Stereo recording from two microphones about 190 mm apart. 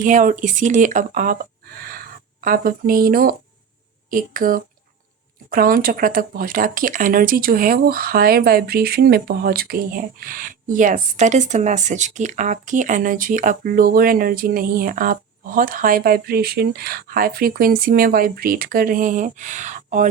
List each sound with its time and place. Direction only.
0.0 s speech: 45° right (ahead or behind)